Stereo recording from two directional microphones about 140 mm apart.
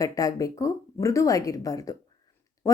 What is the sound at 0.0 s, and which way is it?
Speech, 25° left (ahead or behind).